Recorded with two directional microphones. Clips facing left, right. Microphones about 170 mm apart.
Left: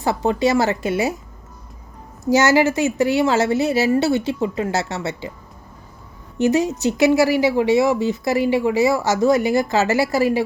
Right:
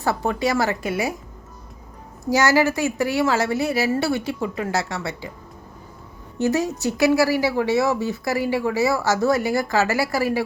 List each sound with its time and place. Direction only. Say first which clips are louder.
0.0 s a woman's voice: left 4 dB; 20° left (ahead or behind)
2.2 s a woman's voice: left 3 dB; 20° left (ahead or behind)
6.4 s a woman's voice: left 4 dB; 20° left (ahead or behind)